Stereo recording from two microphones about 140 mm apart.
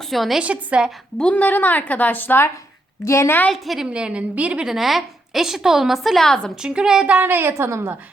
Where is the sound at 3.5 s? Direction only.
Centre (ahead or behind).